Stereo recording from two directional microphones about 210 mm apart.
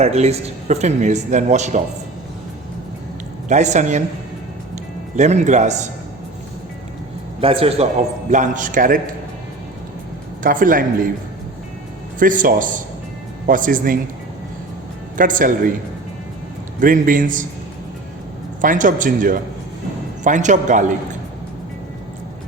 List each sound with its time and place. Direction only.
0.0 s speech: 30° right (ahead or behind)
3.5 s speech: 35° right (ahead or behind)
5.1 s speech: 35° right (ahead or behind)
7.4 s a man's voice: 25° right (ahead or behind)
10.4 s speech: 40° right (ahead or behind)
12.2 s speech: 40° right (ahead or behind)
15.2 s speech: 40° right (ahead or behind)
16.8 s speech: 40° right (ahead or behind)
18.6 s speech: 40° right (ahead or behind)